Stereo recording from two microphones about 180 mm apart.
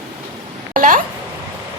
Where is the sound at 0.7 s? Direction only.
50° right (ahead or behind).